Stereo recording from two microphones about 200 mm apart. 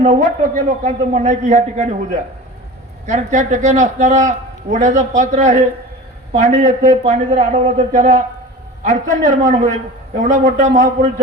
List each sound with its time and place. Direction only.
0.0 s a man's voice: 40° right (ahead or behind)
3.1 s a man's voice: 40° right (ahead or behind)